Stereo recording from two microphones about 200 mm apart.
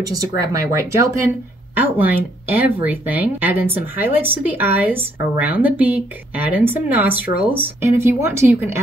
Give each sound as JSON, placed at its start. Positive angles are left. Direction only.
{"t": 0.4, "sound": "speech", "side_deg": -15}